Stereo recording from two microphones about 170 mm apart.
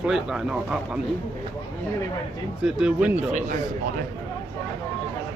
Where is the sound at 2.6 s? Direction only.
5° right (ahead or behind).